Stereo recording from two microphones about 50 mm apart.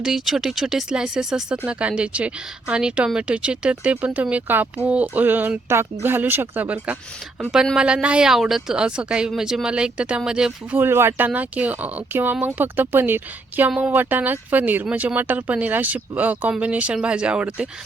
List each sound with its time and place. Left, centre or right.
0.0 s speech: centre
1.6 s speech: right
4.9 s speech: right
5.2 s speech: right
7.8 s speech: centre
8.3 s speech: centre
8.7 s speech: centre
10.8 s speech: right
11.3 s speech: right
13.7 s speech: right
13.9 s speech: right